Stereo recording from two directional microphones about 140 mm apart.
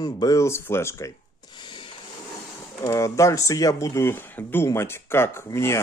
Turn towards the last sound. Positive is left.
turn(degrees=20)  # may be behind; listen again after turning